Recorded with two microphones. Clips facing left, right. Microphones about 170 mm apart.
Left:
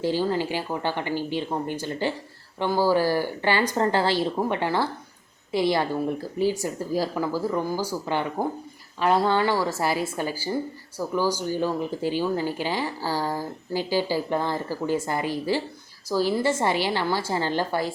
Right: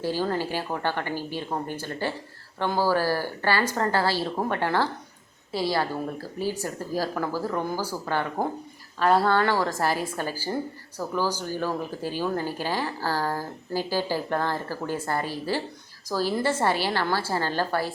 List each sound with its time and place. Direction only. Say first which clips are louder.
0.0 s a woman's voice: left 2 dB; 15° left (ahead or behind)